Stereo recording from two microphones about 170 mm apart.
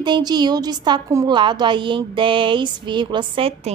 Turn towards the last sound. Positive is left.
turn(degrees=-35)  # may be behind; listen again after turning